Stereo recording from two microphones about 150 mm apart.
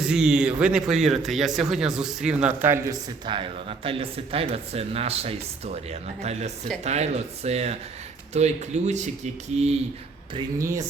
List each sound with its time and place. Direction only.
0.0 s a man's voice: 5° right (ahead or behind)
3.2 s speech: 35° right (ahead or behind)
10.6 s speech: 20° right (ahead or behind)